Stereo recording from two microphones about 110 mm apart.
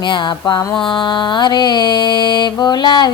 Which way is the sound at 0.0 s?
45° left (ahead or behind).